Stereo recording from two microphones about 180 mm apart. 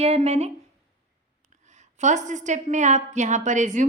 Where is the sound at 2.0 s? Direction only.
40° right (ahead or behind).